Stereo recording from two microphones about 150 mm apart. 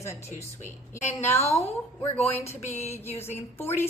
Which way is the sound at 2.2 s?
45° left (ahead or behind).